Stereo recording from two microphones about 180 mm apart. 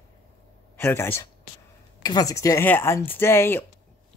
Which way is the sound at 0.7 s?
15° left (ahead or behind).